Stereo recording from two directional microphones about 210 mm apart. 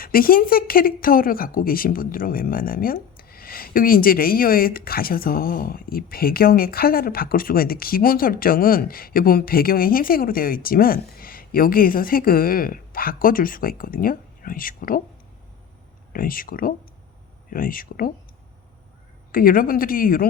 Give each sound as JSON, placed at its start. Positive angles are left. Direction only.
{"t": 0.0, "sound": "speech", "side_deg": 45}
{"t": 16.1, "sound": "speech", "side_deg": 40}
{"t": 19.3, "sound": "speech", "side_deg": 45}